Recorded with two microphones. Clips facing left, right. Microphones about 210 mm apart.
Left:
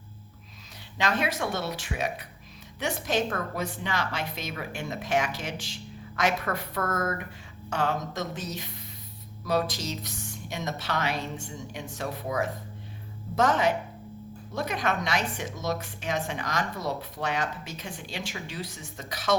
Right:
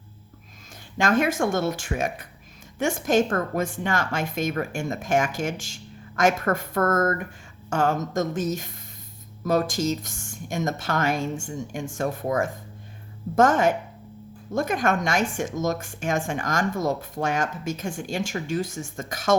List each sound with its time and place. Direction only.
0.9 s a woman's voice: 45° right (ahead or behind)